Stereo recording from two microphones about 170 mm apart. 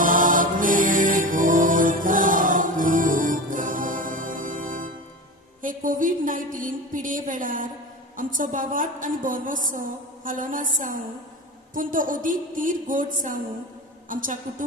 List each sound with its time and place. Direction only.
0.0 s music: 50° right (ahead or behind)
5.6 s a woman's voice: 50° right (ahead or behind)